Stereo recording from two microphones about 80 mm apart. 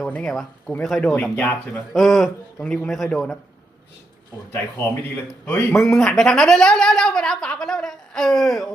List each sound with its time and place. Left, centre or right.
0.2 s speech: centre
1.1 s speech: left
1.9 s speech: centre
4.5 s speech: left
5.8 s speech: centre